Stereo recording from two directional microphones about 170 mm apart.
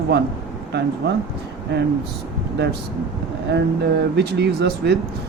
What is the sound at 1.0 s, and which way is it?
Speech, 85° right.